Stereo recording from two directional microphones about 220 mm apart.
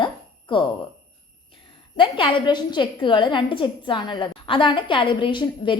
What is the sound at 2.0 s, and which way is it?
A woman's voice, 20° left (ahead or behind).